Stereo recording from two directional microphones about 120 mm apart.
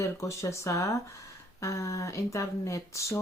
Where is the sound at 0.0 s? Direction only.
25° left (ahead or behind).